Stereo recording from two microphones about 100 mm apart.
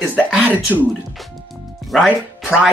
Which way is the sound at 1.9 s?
Centre (ahead or behind).